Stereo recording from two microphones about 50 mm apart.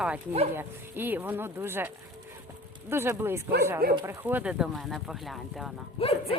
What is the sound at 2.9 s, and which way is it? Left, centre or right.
Speech, right.